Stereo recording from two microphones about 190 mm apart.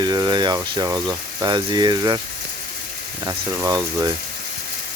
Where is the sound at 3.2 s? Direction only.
20° right (ahead or behind).